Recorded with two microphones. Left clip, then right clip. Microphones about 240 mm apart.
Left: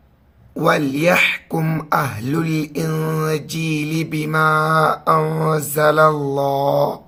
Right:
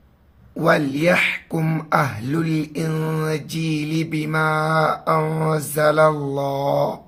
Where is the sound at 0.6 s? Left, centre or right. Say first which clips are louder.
Left 1 dB; centre.